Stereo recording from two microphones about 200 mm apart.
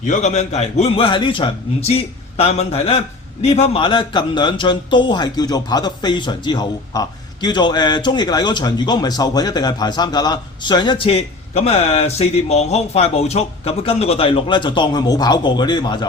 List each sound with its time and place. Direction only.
0.0 s a man's voice: 35° left (ahead or behind); by 16.0 s 20° left (ahead or behind)